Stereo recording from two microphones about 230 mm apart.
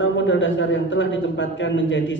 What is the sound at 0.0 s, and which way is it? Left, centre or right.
A man's voice, left.